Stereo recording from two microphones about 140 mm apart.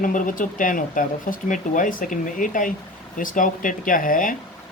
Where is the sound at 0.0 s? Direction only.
75° left (ahead or behind).